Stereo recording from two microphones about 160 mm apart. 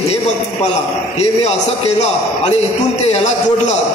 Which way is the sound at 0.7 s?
45° left (ahead or behind).